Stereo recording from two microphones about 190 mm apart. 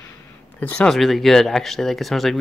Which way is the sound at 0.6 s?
5° left (ahead or behind).